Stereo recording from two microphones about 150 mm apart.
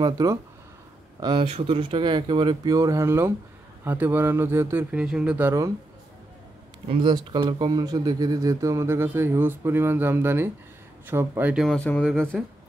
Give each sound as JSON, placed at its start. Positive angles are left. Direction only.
{"t": 0.0, "sound": "speech", "side_deg": -25}
{"t": 1.2, "sound": "speech", "side_deg": -35}
{"t": 6.9, "sound": "speech", "side_deg": -30}
{"t": 11.6, "sound": "speech", "side_deg": 5}